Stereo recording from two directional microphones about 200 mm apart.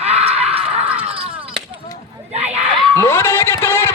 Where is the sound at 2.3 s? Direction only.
30° right (ahead or behind).